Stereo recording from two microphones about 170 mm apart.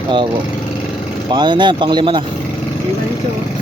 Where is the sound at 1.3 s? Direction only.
25° right (ahead or behind).